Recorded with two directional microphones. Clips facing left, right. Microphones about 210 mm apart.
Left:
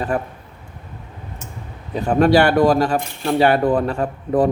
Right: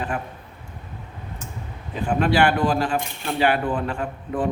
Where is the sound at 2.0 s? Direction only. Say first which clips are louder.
Left 5 dB; 40° left (ahead or behind).